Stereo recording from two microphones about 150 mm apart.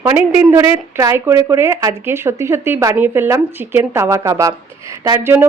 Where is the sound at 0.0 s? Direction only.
15° right (ahead or behind).